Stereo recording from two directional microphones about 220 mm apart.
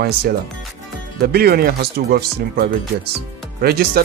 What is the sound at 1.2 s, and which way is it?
Speech, 45° right (ahead or behind).